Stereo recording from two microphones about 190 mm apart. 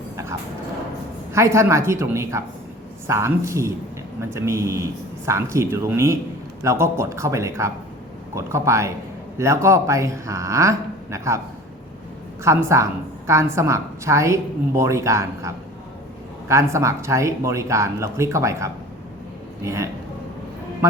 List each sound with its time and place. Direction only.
1.3 s a woman's voice: 15° right (ahead or behind)
12.4 s a woman's voice: 15° right (ahead or behind)